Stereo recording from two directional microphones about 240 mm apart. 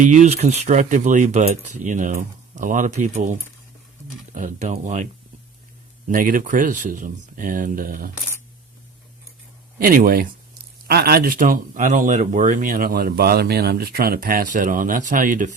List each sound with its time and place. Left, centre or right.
0.0 s speech: right
6.1 s speech: right
9.7 s speech: right